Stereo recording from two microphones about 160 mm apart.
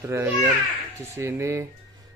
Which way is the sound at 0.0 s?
15° right (ahead or behind).